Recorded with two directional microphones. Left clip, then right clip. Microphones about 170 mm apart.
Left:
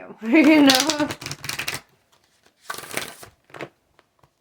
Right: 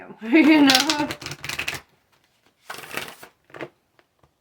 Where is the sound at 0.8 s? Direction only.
25° left (ahead or behind).